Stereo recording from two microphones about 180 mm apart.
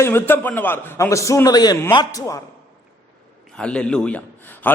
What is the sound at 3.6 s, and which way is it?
A man's voice, 5° left (ahead or behind).